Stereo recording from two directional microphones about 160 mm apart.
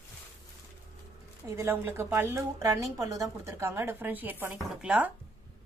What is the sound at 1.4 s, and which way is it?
A woman's voice, 15° right (ahead or behind).